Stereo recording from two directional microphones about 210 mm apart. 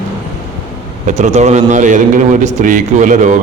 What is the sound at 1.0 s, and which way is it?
A man's voice, 35° right (ahead or behind).